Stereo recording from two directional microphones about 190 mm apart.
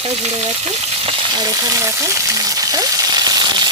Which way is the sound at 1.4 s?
20° right (ahead or behind).